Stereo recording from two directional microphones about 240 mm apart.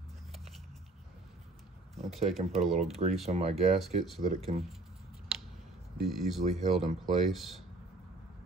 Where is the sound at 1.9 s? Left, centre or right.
Centre.